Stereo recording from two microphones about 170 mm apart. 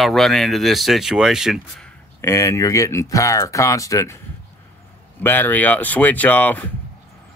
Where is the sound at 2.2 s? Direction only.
15° left (ahead or behind).